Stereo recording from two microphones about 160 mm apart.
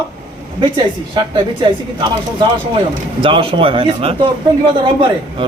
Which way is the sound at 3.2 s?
35° right (ahead or behind).